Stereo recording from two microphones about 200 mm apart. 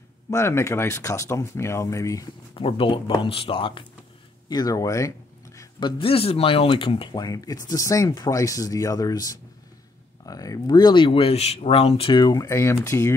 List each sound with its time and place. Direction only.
0.3 s speech: 15° left (ahead or behind)
2.5 s speech: 25° left (ahead or behind)